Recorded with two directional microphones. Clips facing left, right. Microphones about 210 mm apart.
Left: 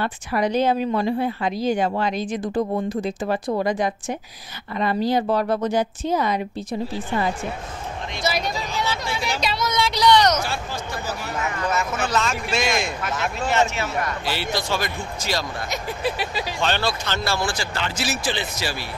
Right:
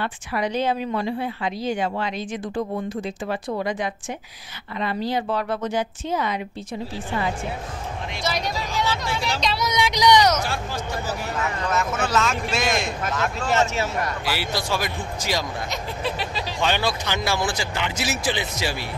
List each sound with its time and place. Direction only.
0.0 s speech: 40° left (ahead or behind)
8.2 s speech: 5° left (ahead or behind)
9.6 s speech: 15° right (ahead or behind); by 13.5 s 5° left (ahead or behind)
13.5 s speech: 40° right (ahead or behind)
14.2 s speech: 10° right (ahead or behind)
15.7 s speech: 10° left (ahead or behind)
16.6 s speech: 15° right (ahead or behind)